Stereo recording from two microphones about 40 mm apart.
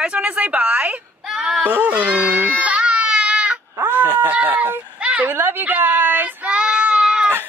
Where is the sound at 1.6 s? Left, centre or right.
Right.